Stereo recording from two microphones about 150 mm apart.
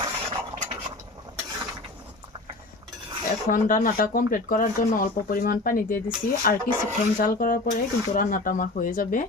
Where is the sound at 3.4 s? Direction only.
65° left (ahead or behind); by 7.7 s 80° left.